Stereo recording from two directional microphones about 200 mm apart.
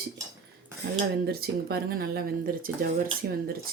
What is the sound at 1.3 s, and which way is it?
Speech, 50° right (ahead or behind).